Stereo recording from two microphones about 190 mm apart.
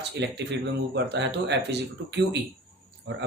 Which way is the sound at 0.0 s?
65° right (ahead or behind).